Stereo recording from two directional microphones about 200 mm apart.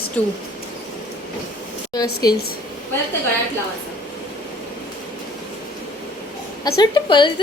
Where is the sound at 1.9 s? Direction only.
20° left (ahead or behind).